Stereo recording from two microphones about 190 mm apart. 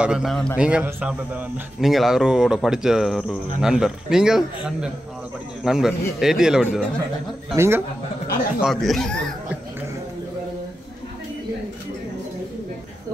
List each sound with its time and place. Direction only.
0.0 s speech: 5° right (ahead or behind)
5.6 s speech: centre (ahead or behind)
7.5 s a man's voice: 15° right (ahead or behind)
8.5 s speech: centre (ahead or behind)